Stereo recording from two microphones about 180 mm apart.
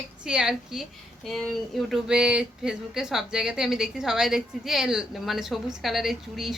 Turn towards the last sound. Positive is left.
turn(degrees=0)  # may be behind; listen again after turning